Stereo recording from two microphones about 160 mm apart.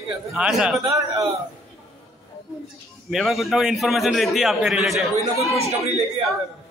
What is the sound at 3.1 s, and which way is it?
A man's voice, centre (ahead or behind).